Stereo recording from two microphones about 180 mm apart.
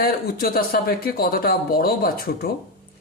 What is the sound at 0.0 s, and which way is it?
Speech, 60° left (ahead or behind).